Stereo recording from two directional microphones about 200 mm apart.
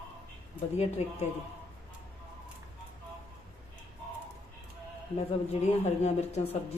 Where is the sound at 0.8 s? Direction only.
30° left (ahead or behind).